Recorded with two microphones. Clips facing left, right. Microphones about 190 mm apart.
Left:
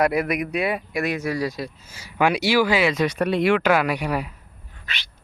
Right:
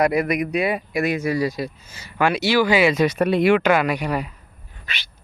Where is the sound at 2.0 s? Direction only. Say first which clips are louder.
Even; 15° left (ahead or behind).